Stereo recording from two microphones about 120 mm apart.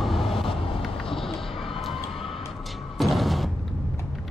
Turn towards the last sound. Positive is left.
turn(degrees=0)  # may be behind; listen again after turning